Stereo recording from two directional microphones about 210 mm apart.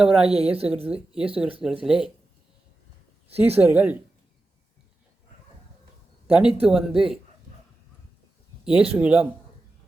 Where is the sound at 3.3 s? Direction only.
10° right (ahead or behind).